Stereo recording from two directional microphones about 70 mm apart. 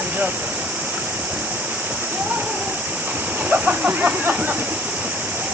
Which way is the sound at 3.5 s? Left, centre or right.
Right.